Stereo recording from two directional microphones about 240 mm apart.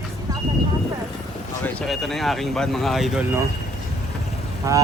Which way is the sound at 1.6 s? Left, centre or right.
Centre.